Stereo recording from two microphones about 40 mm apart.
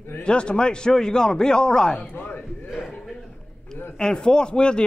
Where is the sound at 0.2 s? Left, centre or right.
Left.